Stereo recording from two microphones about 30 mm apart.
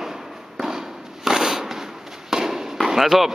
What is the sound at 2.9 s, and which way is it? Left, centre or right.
Speech, centre.